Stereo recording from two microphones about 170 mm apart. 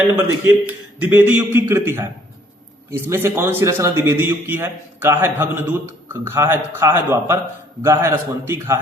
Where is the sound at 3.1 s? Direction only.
15° right (ahead or behind).